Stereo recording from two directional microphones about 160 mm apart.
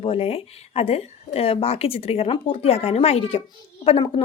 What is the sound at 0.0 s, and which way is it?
A woman's voice, 35° left (ahead or behind).